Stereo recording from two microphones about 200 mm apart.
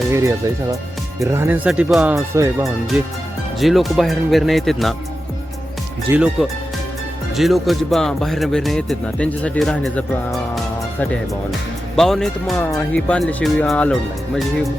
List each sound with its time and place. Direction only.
0.1 s speech: 15° right (ahead or behind)
3.6 s speech: centre (ahead or behind)
6.1 s speech: 5° right (ahead or behind)
11.9 s speech: centre (ahead or behind)